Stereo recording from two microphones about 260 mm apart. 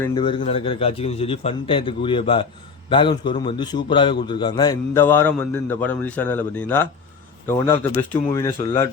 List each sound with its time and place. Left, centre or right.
0.0 s a man's voice: centre